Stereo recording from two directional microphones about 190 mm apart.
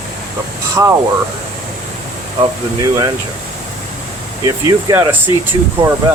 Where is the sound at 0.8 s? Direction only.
15° right (ahead or behind).